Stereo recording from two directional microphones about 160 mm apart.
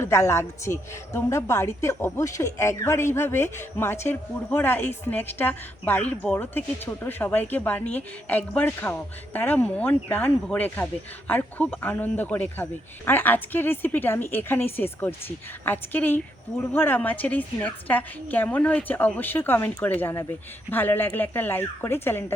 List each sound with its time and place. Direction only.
0.0 s speech: 15° left (ahead or behind)